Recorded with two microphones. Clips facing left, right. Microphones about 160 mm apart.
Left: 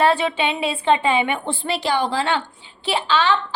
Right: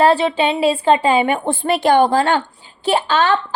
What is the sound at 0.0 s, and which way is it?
A woman's voice, 35° right (ahead or behind).